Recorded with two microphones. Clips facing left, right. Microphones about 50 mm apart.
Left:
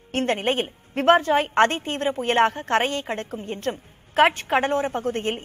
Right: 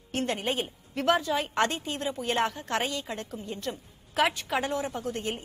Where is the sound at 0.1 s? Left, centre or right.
Left.